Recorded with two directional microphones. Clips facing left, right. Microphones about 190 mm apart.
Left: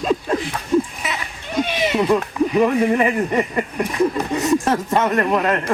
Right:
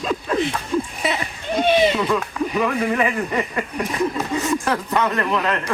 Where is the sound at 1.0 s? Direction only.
30° right (ahead or behind).